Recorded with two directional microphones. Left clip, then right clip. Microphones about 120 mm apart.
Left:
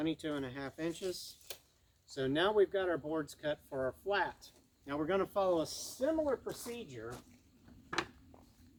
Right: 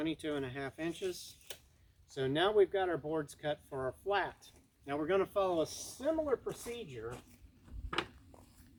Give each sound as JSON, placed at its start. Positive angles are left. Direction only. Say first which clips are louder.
{"t": 0.0, "sound": "speech", "louder": "even", "side_deg": 35}
{"t": 5.6, "sound": "speech", "louder": "even", "side_deg": 0}
{"t": 6.0, "sound": "speech", "louder": "even", "side_deg": 25}
{"t": 6.5, "sound": "speech", "louder": "right 1 dB", "side_deg": 0}
{"t": 6.7, "sound": "speech", "louder": "right 2 dB", "side_deg": 30}